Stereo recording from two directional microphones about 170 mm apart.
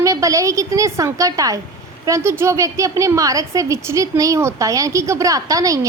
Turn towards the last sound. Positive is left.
turn(degrees=-20)  # may be behind; listen again after turning